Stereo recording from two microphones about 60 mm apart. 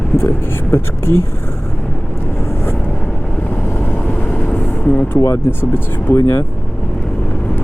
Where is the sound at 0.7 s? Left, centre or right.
Left.